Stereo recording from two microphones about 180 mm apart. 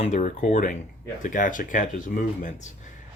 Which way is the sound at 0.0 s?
40° left (ahead or behind).